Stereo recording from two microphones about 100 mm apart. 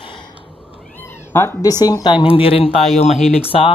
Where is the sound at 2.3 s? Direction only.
65° left (ahead or behind).